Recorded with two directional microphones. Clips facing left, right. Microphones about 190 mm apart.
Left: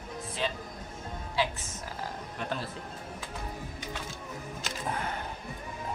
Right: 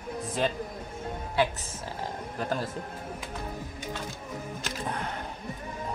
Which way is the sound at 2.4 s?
40° right (ahead or behind).